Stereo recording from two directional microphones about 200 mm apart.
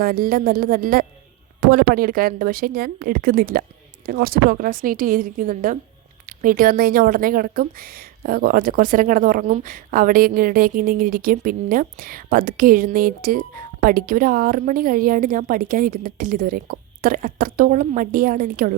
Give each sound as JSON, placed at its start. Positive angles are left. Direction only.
{"t": 0.0, "sound": "speech", "side_deg": -45}